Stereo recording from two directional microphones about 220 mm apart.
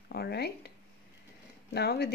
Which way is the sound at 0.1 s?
45° left (ahead or behind).